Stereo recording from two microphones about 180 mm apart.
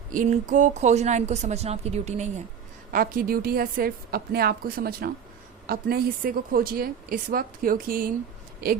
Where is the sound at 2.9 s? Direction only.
50° right (ahead or behind).